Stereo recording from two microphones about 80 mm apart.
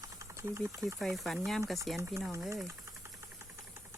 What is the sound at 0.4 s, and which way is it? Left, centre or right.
Speech, right.